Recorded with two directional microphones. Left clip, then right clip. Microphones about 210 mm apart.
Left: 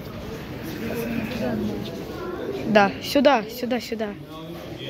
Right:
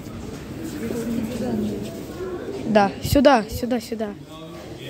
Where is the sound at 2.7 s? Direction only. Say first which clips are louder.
Even; 20° right (ahead or behind).